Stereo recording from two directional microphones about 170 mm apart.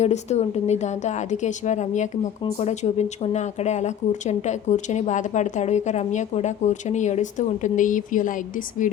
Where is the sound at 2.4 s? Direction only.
35° left (ahead or behind).